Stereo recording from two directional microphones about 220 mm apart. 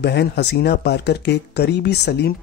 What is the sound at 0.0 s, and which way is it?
Speech, 50° left (ahead or behind).